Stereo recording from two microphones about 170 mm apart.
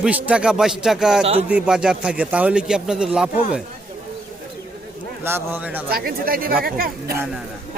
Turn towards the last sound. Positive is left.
turn(degrees=-60)  # may be behind; listen again after turning